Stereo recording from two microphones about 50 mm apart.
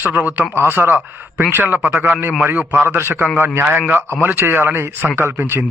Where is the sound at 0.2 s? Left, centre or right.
Right.